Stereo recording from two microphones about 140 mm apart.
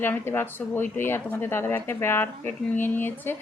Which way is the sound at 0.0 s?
15° left (ahead or behind).